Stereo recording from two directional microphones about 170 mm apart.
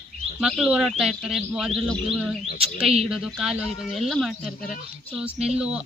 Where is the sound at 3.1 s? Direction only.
Centre (ahead or behind).